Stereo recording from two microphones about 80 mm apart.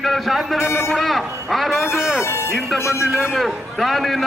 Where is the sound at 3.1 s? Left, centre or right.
Centre.